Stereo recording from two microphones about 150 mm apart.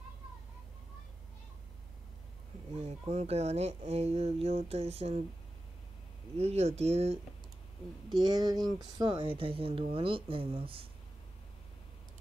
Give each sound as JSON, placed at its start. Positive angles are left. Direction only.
{"t": 2.7, "sound": "speech", "side_deg": -45}
{"t": 6.3, "sound": "speech", "side_deg": -45}
{"t": 8.2, "sound": "speech", "side_deg": -25}